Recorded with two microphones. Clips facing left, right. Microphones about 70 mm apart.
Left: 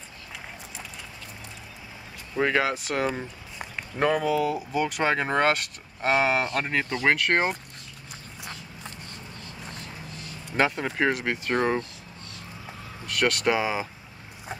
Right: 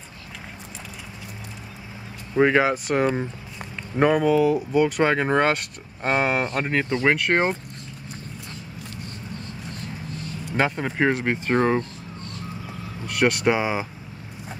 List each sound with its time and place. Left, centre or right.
2.3 s speech: centre
2.7 s speech: centre
10.5 s speech: centre
11.1 s speech: right
13.0 s speech: centre